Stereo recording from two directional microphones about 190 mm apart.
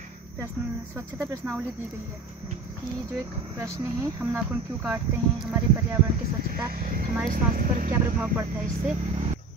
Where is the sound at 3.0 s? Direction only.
15° right (ahead or behind).